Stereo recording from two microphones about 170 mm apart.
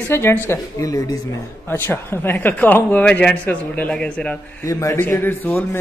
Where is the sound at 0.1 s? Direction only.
15° left (ahead or behind).